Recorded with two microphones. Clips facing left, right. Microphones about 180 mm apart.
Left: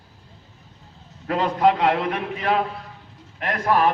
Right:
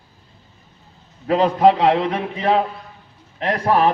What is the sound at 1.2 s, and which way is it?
A man's voice, 30° right (ahead or behind).